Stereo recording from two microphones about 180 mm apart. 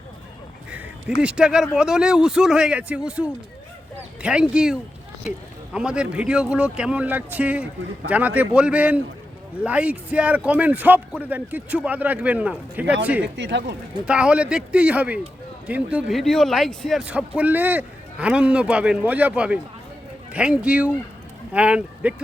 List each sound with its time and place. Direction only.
1.2 s a man's voice: 5° right (ahead or behind)
13.2 s speech: 75° right (ahead or behind)
14.0 s a man's voice: 5° right (ahead or behind)